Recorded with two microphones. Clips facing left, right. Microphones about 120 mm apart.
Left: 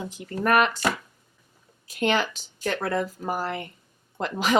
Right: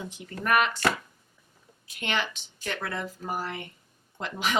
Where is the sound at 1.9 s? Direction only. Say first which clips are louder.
Left 7 dB; 40° left (ahead or behind).